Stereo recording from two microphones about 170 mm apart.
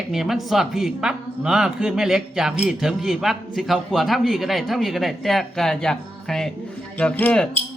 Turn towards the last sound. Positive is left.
turn(degrees=10)  # may be behind; listen again after turning